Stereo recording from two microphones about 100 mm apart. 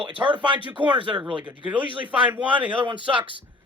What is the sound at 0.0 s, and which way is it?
Speech, 55° right (ahead or behind).